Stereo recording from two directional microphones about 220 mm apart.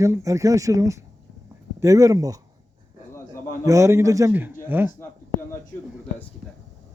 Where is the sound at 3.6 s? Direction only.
15° right (ahead or behind).